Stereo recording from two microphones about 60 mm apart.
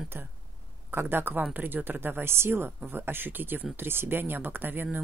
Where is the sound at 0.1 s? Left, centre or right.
Right.